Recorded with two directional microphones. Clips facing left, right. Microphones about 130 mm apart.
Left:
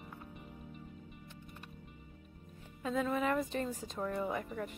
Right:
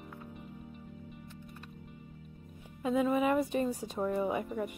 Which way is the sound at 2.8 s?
10° right (ahead or behind).